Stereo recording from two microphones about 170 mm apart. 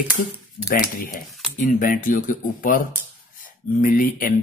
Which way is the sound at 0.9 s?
60° left (ahead or behind).